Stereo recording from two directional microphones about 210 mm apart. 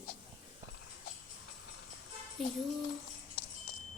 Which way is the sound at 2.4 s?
Centre (ahead or behind).